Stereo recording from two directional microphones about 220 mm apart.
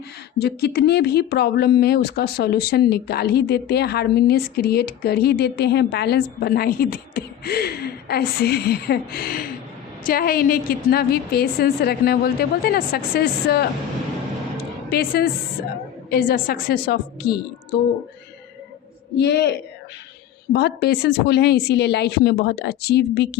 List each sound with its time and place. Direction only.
0.3 s speech: 45° left (ahead or behind)
14.8 s a woman's voice: 45° left (ahead or behind)
19.1 s speech: 50° left (ahead or behind)